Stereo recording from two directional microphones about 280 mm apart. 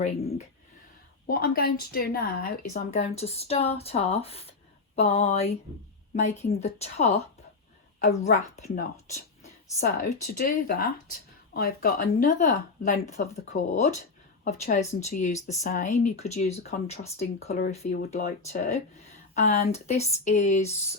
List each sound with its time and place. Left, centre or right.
0.0 s speech: left